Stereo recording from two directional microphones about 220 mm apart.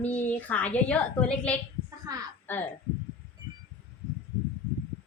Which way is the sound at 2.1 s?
15° right (ahead or behind).